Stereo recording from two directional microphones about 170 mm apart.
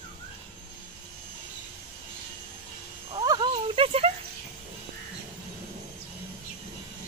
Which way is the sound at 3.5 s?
35° right (ahead or behind).